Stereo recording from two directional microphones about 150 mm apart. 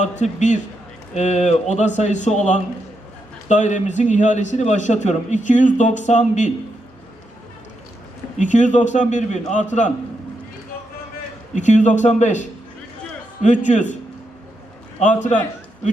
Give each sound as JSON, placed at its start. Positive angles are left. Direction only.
{"t": 0.0, "sound": "a man's voice", "side_deg": 55}
{"t": 8.4, "sound": "a man's voice", "side_deg": 55}
{"t": 11.5, "sound": "a man's voice", "side_deg": 55}